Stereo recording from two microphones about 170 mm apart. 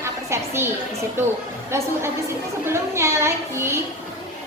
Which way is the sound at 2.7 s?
15° right (ahead or behind).